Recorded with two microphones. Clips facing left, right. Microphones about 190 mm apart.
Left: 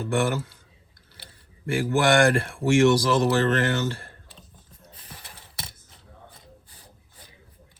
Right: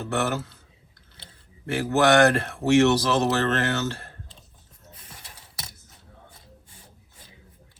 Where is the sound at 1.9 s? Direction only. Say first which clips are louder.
Right 2 dB; 10° left (ahead or behind).